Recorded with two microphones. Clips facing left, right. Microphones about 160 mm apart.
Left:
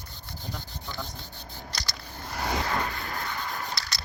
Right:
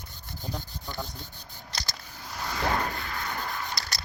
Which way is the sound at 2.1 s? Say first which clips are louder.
Left 5 dB; 65° left (ahead or behind).